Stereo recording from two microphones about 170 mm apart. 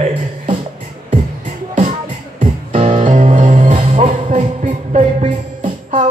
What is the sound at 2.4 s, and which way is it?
Music, 35° right (ahead or behind).